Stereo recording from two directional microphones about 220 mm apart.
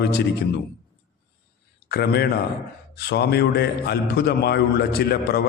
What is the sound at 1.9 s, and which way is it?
A man's voice, 45° left (ahead or behind).